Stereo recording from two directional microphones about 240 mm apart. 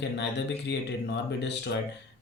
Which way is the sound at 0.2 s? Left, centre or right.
Left.